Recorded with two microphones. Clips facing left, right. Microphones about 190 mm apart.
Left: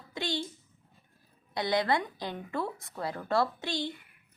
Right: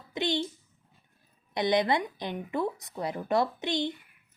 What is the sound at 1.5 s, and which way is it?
A woman's voice, 20° right (ahead or behind).